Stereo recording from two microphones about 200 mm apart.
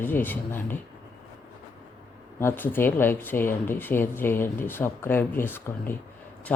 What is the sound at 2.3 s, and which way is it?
Speech, 10° left (ahead or behind).